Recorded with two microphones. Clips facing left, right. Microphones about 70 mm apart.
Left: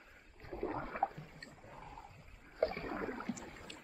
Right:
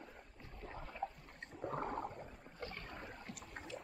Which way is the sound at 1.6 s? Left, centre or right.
Right.